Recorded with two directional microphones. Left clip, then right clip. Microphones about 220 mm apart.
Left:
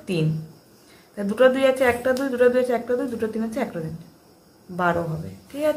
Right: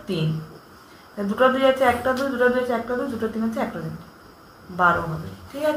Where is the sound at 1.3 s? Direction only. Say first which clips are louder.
Left 1 dB; 50° left (ahead or behind).